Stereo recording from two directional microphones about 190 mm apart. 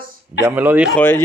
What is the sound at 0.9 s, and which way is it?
Speech, 10° left (ahead or behind).